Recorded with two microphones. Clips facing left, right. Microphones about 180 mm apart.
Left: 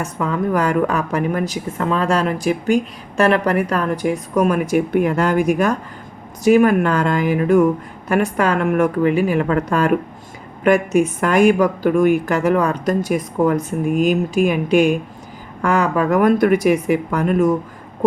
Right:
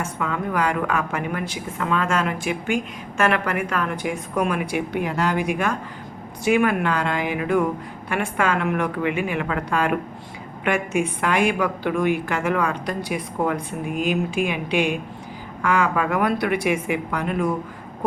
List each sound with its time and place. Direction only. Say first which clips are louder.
0.0 s a woman's voice: left 5 dB; 40° left (ahead or behind)